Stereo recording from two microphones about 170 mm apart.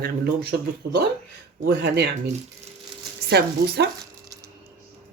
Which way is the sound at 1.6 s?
75° right (ahead or behind).